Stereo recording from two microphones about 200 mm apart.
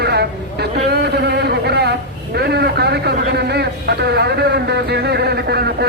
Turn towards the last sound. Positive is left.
turn(degrees=-55)  # may be behind; listen again after turning